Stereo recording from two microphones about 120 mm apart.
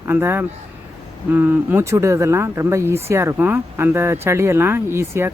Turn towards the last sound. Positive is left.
turn(degrees=-20)  # may be behind; listen again after turning